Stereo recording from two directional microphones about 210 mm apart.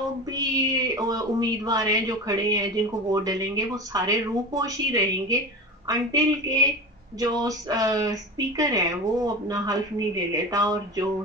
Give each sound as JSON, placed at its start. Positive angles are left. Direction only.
{"t": 0.3, "sound": "speech", "side_deg": -15}